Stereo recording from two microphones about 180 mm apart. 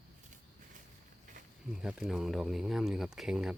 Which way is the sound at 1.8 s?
Centre (ahead or behind).